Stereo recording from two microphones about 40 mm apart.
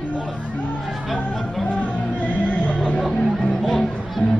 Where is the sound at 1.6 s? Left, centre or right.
Left.